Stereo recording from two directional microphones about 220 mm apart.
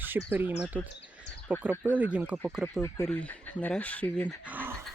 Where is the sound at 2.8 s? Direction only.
15° left (ahead or behind).